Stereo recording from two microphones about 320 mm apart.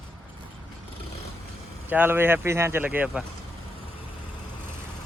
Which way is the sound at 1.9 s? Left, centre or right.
Centre.